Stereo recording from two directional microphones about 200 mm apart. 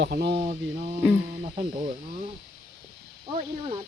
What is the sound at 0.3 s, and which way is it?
Speech, 25° right (ahead or behind).